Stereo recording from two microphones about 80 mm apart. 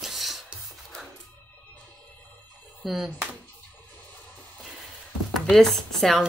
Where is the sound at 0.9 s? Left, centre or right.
Centre.